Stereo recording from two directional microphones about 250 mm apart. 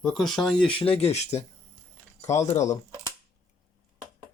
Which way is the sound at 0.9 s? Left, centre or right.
Left.